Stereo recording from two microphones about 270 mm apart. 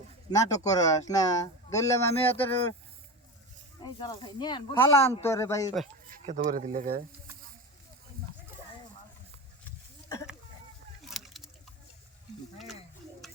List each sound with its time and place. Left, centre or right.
0.3 s speech: centre
3.8 s speech: centre
6.1 s speech: right
11.1 s a sound: centre